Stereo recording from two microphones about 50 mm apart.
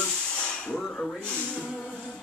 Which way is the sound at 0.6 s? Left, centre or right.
Centre.